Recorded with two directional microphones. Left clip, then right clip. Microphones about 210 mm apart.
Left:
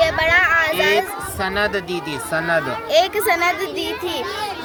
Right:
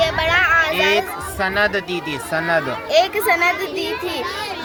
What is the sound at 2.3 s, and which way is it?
Speech, centre (ahead or behind).